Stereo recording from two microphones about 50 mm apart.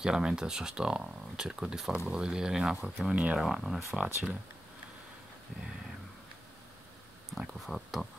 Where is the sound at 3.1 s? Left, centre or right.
Right.